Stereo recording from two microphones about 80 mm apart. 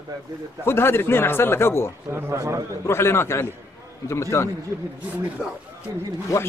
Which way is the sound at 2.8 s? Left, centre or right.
Left.